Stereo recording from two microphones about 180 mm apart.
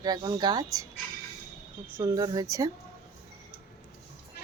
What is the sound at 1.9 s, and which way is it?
Speech, 15° right (ahead or behind).